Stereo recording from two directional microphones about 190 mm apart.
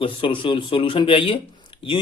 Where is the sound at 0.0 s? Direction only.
25° left (ahead or behind).